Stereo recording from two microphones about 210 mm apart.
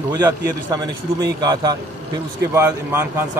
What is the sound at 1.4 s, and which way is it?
Speech, 20° right (ahead or behind).